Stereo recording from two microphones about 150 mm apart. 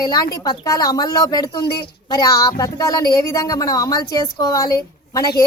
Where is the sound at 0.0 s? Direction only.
25° left (ahead or behind).